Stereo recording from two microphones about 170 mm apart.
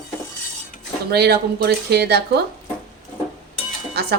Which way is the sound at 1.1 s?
70° right (ahead or behind).